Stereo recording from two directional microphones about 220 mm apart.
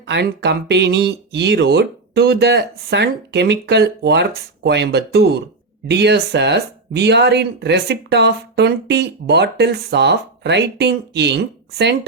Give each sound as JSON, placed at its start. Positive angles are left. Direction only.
{"t": 0.1, "sound": "speech", "side_deg": -50}